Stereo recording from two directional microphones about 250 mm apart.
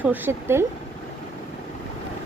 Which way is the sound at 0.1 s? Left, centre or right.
Centre.